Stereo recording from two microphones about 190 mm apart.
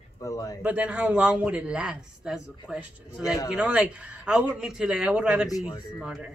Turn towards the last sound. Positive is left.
turn(degrees=-5)  # may be behind; listen again after turning